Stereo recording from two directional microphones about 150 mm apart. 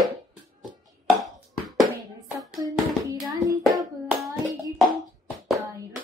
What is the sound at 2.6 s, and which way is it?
Child singing, 25° right (ahead or behind).